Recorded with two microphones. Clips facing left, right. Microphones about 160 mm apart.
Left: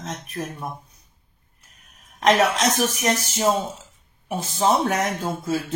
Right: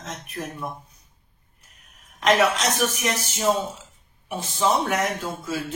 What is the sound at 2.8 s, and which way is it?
Speech, 40° left (ahead or behind).